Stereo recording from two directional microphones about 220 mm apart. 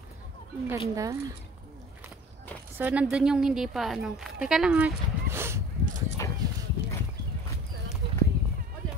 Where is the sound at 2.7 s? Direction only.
10° right (ahead or behind).